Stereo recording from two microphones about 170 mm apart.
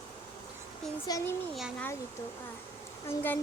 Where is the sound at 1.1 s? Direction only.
20° left (ahead or behind).